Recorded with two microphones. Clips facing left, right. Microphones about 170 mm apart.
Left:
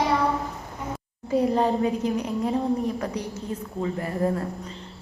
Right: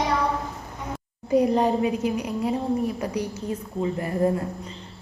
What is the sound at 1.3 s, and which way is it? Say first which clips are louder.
A woman's voice: right 2 dB; 15° right (ahead or behind).